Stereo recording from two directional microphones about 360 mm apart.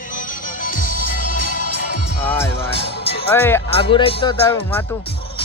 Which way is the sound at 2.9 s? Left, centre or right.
Left.